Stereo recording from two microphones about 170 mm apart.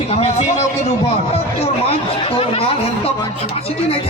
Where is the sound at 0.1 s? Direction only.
40° left (ahead or behind).